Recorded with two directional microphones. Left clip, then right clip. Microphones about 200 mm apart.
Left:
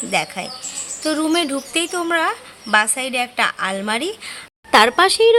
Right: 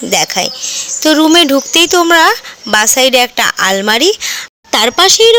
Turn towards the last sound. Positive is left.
turn(degrees=-35)  # may be behind; listen again after turning